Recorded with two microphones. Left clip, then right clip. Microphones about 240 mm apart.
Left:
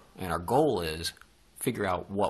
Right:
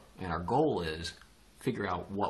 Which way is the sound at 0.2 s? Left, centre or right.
Left.